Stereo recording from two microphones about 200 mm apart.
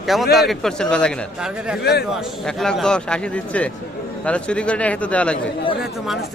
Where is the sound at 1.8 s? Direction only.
55° left (ahead or behind).